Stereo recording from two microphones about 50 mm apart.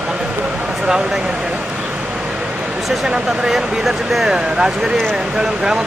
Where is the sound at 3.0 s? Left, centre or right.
Centre.